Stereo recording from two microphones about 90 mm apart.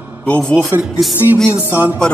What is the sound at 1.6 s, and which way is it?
Music, 20° right (ahead or behind).